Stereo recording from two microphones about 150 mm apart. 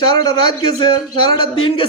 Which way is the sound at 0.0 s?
30° left (ahead or behind).